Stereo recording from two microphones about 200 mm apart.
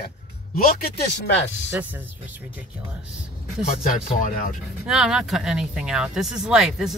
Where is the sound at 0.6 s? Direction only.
45° left (ahead or behind).